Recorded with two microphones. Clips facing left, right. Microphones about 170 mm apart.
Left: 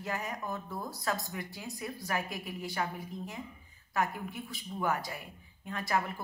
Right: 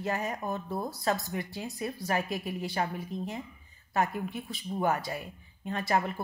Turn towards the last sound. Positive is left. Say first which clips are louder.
# right 4 dB
turn(degrees=-30)  # may be behind; listen again after turning